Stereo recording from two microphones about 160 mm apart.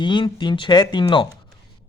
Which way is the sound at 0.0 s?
30° left (ahead or behind).